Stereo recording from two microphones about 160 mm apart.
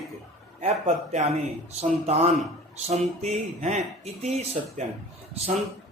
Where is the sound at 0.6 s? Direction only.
45° right (ahead or behind).